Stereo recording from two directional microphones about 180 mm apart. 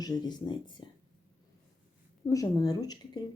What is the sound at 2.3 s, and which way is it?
Speech, 20° left (ahead or behind).